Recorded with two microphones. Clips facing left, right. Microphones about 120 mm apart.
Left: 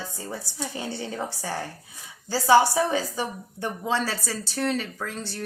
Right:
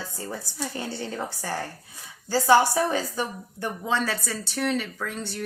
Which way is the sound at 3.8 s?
30° left (ahead or behind).